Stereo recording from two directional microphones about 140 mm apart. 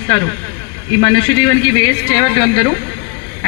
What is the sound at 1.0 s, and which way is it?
Speech, 30° left (ahead or behind).